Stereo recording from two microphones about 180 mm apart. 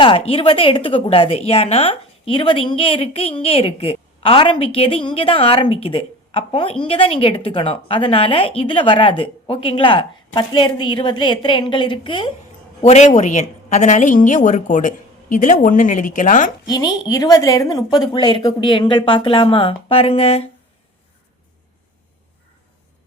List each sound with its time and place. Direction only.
0.0 s a woman's voice: 30° left (ahead or behind)
12.8 s a woman's voice: 40° left (ahead or behind)
16.6 s a woman's voice: 20° left (ahead or behind)